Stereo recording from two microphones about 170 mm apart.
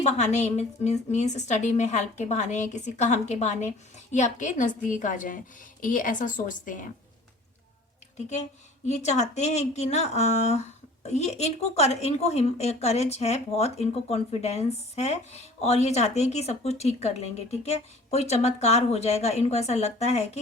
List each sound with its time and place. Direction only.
0.0 s a woman's voice: 40° left (ahead or behind)
8.9 s speech: 40° left (ahead or behind)